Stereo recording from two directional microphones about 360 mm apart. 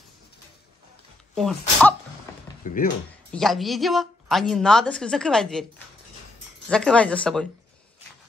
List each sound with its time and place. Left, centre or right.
1.3 s a woman's voice: centre
2.6 s speech: left
3.3 s a woman's voice: centre
6.7 s a woman's voice: centre